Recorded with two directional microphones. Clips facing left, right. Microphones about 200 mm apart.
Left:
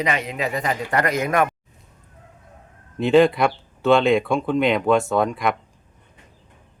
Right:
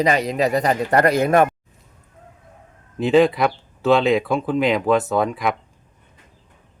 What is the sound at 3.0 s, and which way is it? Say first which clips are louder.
Speech: even; centre (ahead or behind).